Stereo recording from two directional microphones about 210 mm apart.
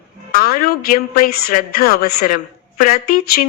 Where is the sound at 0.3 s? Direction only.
45° left (ahead or behind).